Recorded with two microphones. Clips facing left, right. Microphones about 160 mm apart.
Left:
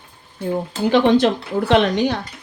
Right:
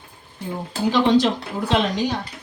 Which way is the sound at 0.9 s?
55° left (ahead or behind).